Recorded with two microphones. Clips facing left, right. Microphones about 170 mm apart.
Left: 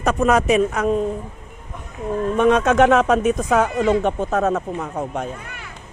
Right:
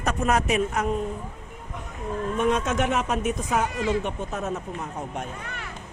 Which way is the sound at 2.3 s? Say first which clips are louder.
Left 8 dB; 85° left.